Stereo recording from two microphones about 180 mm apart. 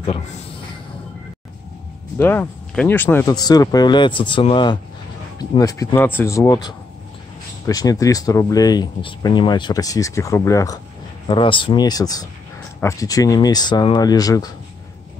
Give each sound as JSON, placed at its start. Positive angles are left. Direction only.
{"t": 0.0, "sound": "speech", "side_deg": 30}
{"t": 2.1, "sound": "speech", "side_deg": 10}
{"t": 3.3, "sound": "speech", "side_deg": 20}
{"t": 11.2, "sound": "speech", "side_deg": 30}